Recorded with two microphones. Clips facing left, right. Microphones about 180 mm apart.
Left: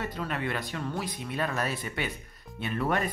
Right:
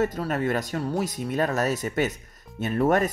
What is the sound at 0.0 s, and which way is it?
Speech, 45° right (ahead or behind).